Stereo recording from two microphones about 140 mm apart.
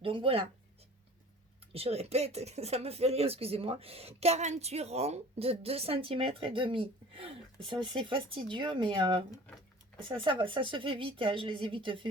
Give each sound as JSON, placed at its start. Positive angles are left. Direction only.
{"t": 0.0, "sound": "speech", "side_deg": -40}
{"t": 1.7, "sound": "speech", "side_deg": -45}